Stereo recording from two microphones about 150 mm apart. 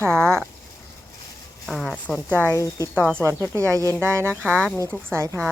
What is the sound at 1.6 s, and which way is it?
Speech, centre (ahead or behind).